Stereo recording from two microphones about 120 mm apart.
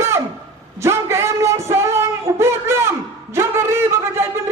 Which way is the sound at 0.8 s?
20° right (ahead or behind).